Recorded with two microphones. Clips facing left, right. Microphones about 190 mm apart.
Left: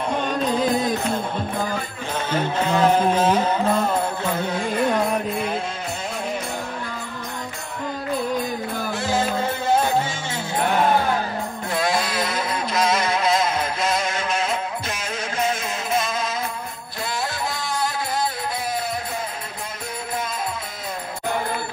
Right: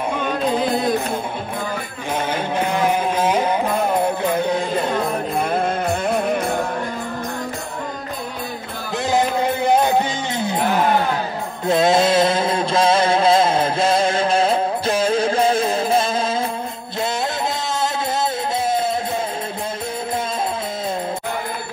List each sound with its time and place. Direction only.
2.3 s a sound: 15° right (ahead or behind)
5.4 s music: 55° right (ahead or behind)
9.0 s music: 15° right (ahead or behind)
11.6 s music: 25° right (ahead or behind)